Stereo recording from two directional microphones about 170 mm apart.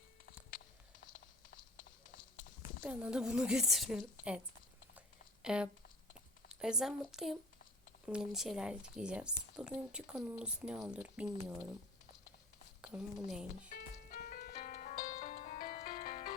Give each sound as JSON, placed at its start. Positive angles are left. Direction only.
{"t": 2.8, "sound": "speech", "side_deg": -10}
{"t": 4.9, "sound": "a sound", "side_deg": -5}
{"t": 6.5, "sound": "speech", "side_deg": -5}
{"t": 12.8, "sound": "speech", "side_deg": -5}
{"t": 13.7, "sound": "music", "side_deg": 65}
{"t": 15.2, "sound": "music", "side_deg": 40}